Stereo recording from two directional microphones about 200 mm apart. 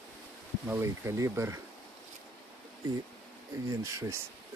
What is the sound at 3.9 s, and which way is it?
Speech, 15° right (ahead or behind).